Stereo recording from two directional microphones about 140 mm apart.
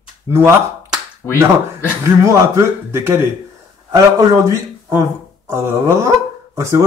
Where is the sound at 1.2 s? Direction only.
15° left (ahead or behind).